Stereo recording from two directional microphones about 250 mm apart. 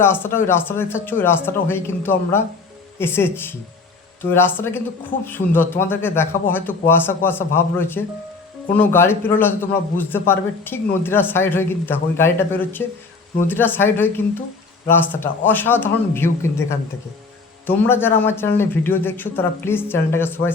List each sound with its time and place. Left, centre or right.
0.0 s a man's voice: centre